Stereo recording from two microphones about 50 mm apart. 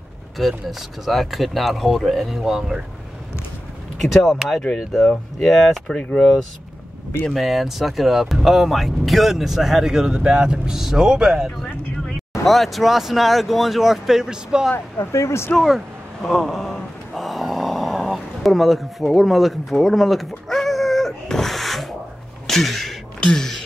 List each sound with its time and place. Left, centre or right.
0.4 s speech: centre
4.0 s speech: centre
7.2 s speech: centre
12.3 s speech: centre
15.0 s speech: left
15.5 s speech: centre
16.2 s a sound: centre
23.2 s speech: centre